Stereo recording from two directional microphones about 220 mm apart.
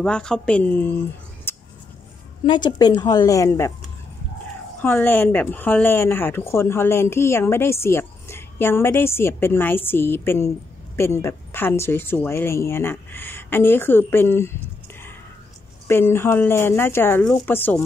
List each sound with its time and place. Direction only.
0.0 s speech: 5° left (ahead or behind)
2.4 s speech: 20° left (ahead or behind)
4.8 s speech: 10° left (ahead or behind)
15.9 s speech: 10° left (ahead or behind)